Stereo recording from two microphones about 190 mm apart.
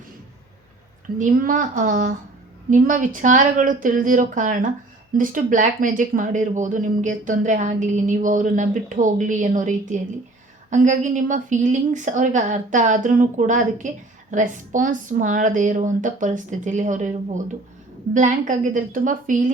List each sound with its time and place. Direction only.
1.2 s a woman's voice: 45° right (ahead or behind)